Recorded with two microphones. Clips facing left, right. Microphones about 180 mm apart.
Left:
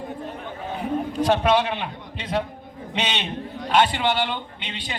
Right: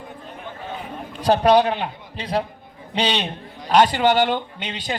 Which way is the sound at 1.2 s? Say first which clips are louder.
Right 5 dB; 35° right (ahead or behind).